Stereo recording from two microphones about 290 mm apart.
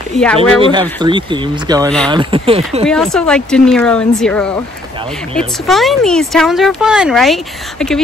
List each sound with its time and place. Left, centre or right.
0.1 s speech: centre
0.6 s speech: centre
2.9 s speech: centre
5.7 s speech: centre